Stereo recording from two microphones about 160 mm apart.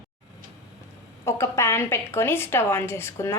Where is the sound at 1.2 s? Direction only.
15° left (ahead or behind).